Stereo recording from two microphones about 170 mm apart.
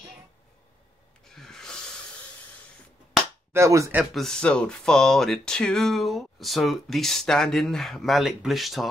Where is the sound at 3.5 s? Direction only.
15° right (ahead or behind).